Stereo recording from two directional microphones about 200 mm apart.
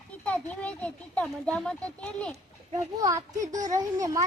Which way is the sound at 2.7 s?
15° right (ahead or behind).